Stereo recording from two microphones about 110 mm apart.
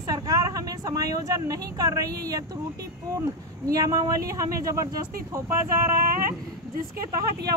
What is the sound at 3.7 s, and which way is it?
Speech, 30° right (ahead or behind).